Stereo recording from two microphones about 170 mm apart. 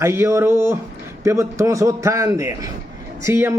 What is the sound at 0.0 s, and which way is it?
A man's voice, 15° right (ahead or behind).